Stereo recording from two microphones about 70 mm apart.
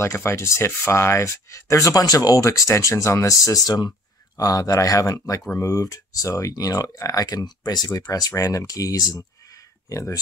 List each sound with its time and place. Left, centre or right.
0.0 s speech: left
4.4 s speech: left
8.0 s speech: left
9.8 s speech: left